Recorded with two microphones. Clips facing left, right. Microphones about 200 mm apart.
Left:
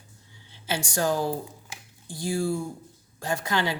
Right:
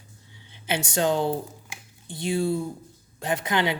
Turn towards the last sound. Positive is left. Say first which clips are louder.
# right 2 dB
turn(degrees=-20)  # may be behind; listen again after turning